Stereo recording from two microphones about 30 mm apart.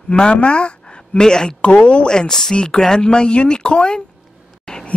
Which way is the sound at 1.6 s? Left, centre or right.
Left.